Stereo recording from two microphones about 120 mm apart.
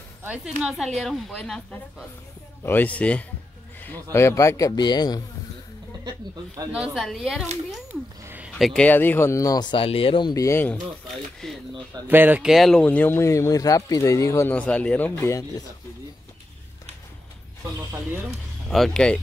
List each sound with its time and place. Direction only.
0.6 s a woman's voice: 5° right (ahead or behind); by 5.2 s 35° left (ahead or behind)
6.0 s speech: 30° right (ahead or behind)
6.7 s a woman's voice: 5° right (ahead or behind)
7.9 s a sound: 15° right (ahead or behind)
8.5 s a woman's voice: centre (ahead or behind)
8.8 s speech: 15° left (ahead or behind); by 10.3 s 45° left (ahead or behind)
10.3 s speech: 25° left (ahead or behind)
11.4 s a woman's voice: 5° left (ahead or behind)
12.1 s speech: 15° right (ahead or behind)
12.4 s a woman's voice: centre (ahead or behind)
12.8 s speech: 15° left (ahead or behind)
14.5 s speech: 15° left (ahead or behind)
18.7 s a woman's voice: 5° left (ahead or behind)